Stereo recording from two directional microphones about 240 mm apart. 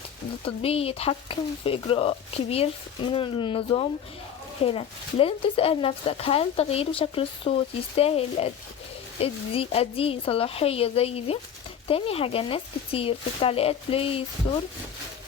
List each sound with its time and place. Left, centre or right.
0.4 s speech: left